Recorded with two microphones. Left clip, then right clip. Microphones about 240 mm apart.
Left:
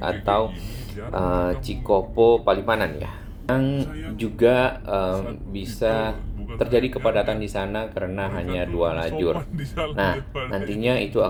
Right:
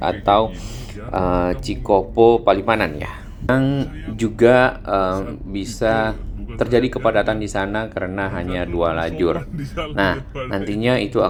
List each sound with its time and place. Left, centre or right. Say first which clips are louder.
0.0 s speech: right 6 dB; right
10.2 s speech: right 1 dB; centre
10.5 s speech: right 4 dB; right